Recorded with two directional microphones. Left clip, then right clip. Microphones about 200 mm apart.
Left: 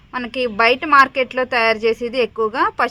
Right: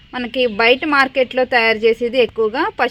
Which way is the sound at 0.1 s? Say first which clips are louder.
Right 3 dB; 25° right (ahead or behind).